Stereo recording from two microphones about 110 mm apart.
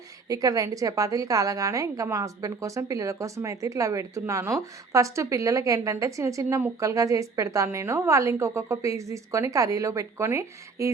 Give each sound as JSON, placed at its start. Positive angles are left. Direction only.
{"t": 0.3, "sound": "a woman's voice", "side_deg": -30}